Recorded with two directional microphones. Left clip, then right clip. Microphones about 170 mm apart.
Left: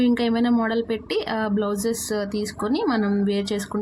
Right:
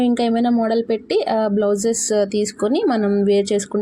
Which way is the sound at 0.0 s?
10° right (ahead or behind).